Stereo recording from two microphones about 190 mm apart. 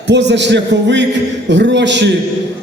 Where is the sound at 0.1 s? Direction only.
65° right (ahead or behind).